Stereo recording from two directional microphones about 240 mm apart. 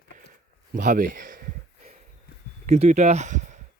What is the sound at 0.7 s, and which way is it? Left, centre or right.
Speech, right.